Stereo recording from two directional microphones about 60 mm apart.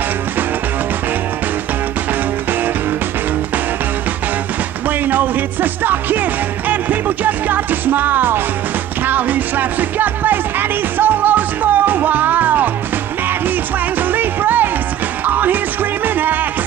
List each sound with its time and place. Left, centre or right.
4.8 s music: right
14.1 s music: right